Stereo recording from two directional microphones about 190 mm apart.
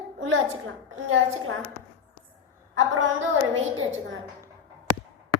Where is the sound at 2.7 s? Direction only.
90° right.